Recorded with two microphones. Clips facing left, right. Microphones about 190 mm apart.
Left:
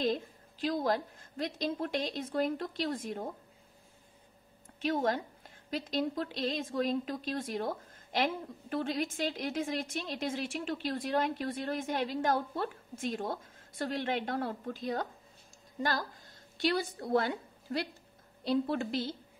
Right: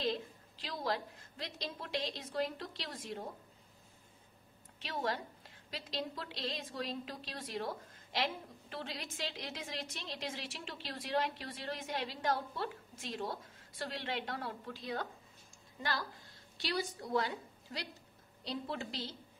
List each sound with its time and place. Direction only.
0.0 s a woman's voice: 50° left (ahead or behind)
4.7 s a woman's voice: 50° left (ahead or behind)
16.5 s a woman's voice: 55° left (ahead or behind)